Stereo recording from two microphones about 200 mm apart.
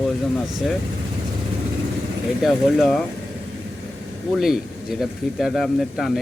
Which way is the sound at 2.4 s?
Centre (ahead or behind).